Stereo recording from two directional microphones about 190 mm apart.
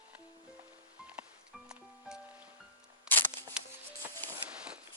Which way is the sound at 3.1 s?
5° right (ahead or behind).